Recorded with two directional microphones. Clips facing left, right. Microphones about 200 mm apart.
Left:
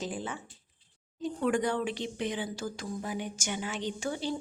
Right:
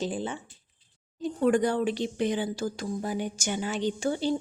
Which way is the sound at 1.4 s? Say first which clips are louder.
Right 5 dB; 35° right (ahead or behind).